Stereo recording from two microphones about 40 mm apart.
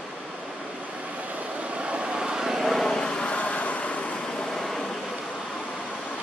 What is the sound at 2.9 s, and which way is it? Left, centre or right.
Vehicle, centre.